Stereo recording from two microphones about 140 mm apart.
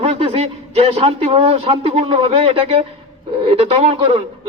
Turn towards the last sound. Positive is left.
turn(degrees=-40)  # may be behind; listen again after turning